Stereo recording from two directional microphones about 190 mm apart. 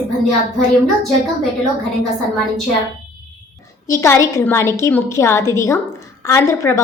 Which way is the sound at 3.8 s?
15° left (ahead or behind).